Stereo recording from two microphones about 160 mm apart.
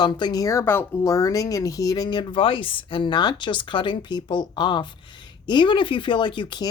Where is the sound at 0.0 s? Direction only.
25° left (ahead or behind).